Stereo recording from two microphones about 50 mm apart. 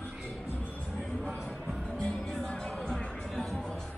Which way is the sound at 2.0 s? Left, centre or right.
Centre.